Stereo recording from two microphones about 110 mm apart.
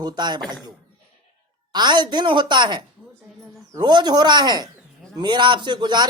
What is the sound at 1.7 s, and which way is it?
A woman's voice, 40° right (ahead or behind).